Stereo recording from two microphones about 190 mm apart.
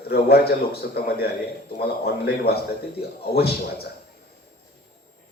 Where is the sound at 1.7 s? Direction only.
55° left (ahead or behind).